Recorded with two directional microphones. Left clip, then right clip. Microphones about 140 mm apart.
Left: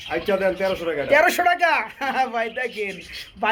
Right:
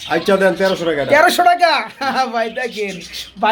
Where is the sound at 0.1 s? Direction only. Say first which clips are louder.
Right 8 dB; 65° right (ahead or behind).